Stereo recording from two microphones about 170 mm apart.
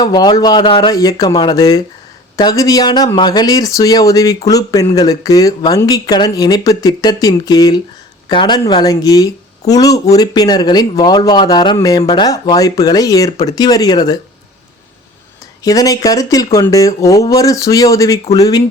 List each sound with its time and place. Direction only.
0.0 s speech: 25° left (ahead or behind)
15.6 s speech: 20° left (ahead or behind)